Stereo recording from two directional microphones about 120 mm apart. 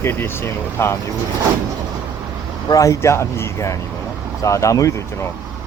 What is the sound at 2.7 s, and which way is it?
Speech, 25° left (ahead or behind).